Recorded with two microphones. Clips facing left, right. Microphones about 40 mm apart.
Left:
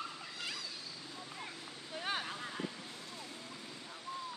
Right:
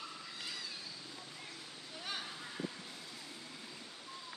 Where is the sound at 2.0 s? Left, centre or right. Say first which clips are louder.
Left 5 dB; left.